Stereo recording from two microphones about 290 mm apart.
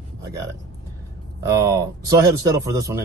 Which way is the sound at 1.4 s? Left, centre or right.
Centre.